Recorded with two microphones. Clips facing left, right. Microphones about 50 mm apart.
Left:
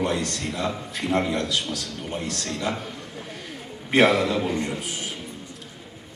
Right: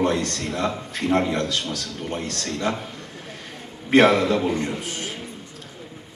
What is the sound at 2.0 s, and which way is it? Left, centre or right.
Speech, centre.